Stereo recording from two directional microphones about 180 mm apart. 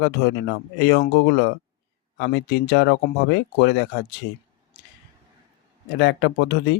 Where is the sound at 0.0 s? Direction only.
70° left (ahead or behind).